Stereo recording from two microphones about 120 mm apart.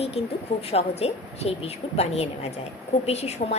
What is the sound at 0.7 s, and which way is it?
A woman's voice, 60° left (ahead or behind).